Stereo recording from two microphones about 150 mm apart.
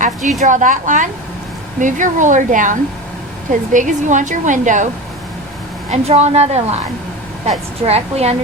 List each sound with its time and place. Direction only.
0.0 s speech: 60° right (ahead or behind)
5.9 s a woman's voice: 45° right (ahead or behind)
7.9 s a woman's voice: 45° right (ahead or behind)